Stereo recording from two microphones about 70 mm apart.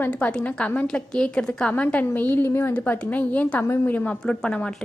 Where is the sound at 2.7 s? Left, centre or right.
Left.